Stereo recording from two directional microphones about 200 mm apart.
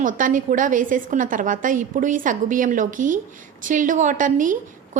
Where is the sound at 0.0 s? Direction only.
40° right (ahead or behind).